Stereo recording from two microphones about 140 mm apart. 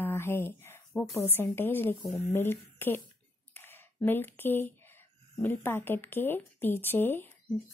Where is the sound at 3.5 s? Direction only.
15° left (ahead or behind).